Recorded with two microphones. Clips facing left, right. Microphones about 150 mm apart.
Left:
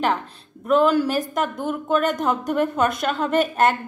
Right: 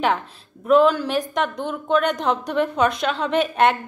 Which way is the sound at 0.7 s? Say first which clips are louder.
Right 1 dB; centre (ahead or behind).